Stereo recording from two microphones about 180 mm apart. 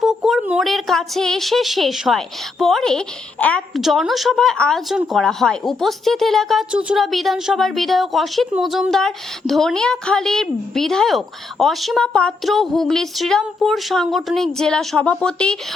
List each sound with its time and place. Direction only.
0.0 s a woman's voice: centre (ahead or behind)